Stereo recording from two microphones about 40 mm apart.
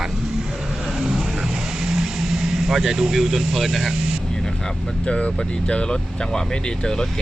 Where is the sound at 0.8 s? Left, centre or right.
Centre.